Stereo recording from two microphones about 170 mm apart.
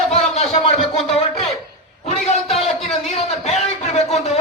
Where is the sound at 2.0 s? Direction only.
40° left (ahead or behind).